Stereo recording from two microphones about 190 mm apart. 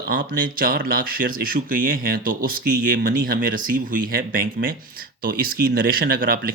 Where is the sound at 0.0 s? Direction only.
50° right (ahead or behind).